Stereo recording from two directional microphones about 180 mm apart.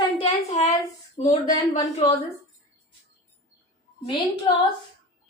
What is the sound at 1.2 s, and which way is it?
Speech, 40° left (ahead or behind).